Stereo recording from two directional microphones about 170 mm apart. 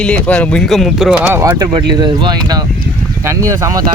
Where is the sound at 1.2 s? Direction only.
20° right (ahead or behind).